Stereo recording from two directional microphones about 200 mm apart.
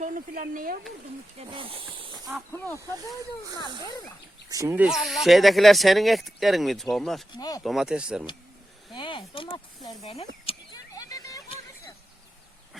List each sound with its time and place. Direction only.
0.0 s speech: 40° right (ahead or behind)
1.4 s speech: 25° right (ahead or behind)
4.4 s speech: 15° right (ahead or behind); by 7.3 s centre (ahead or behind)
7.3 s speech: 20° left (ahead or behind)
7.6 s speech: centre (ahead or behind)
8.9 s speech: 25° left (ahead or behind)
10.5 s a sound: 30° left (ahead or behind)
10.9 s a sound: 15° left (ahead or behind)